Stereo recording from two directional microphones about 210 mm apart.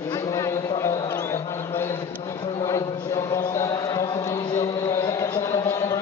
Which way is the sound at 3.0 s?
15° left (ahead or behind).